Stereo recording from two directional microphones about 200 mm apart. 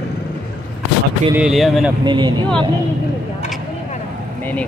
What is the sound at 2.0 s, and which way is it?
Speech, 20° right (ahead or behind).